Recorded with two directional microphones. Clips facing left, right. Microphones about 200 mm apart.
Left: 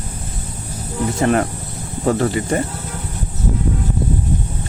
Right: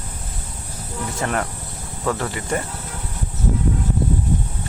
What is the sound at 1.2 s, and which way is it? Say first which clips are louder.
Speech: left 8 dB; 25° left (ahead or behind).